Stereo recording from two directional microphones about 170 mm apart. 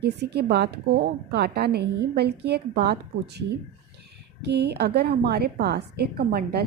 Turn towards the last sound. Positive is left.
turn(degrees=-65)  # may be behind; listen again after turning